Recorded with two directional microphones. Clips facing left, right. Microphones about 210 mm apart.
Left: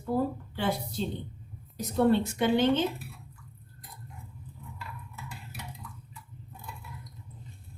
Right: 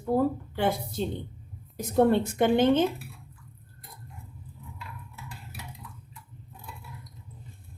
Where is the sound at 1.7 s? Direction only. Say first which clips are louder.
Right 2 dB; 50° right (ahead or behind).